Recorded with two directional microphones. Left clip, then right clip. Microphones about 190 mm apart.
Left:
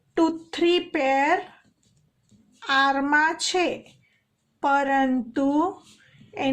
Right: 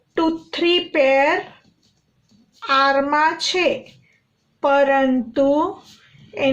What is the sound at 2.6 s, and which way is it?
A woman's voice, 45° left (ahead or behind).